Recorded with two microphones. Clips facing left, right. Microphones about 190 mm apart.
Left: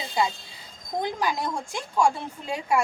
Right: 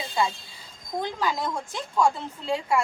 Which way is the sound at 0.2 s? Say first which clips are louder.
Left 1 dB; 20° left (ahead or behind).